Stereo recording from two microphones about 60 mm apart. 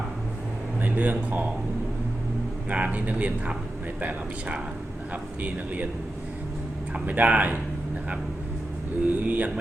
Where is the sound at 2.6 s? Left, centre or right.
Right.